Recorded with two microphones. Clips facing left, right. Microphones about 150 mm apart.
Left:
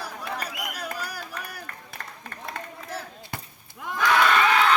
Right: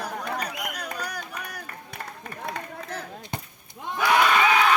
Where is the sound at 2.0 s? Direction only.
15° right (ahead or behind).